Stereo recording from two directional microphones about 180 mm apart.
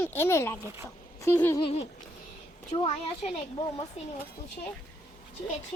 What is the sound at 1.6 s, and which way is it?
A child's voice, 35° left (ahead or behind).